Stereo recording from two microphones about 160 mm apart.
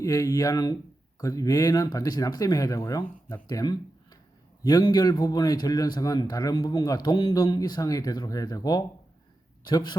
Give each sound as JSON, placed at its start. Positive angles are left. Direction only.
{"t": 0.0, "sound": "a man's voice", "side_deg": 20}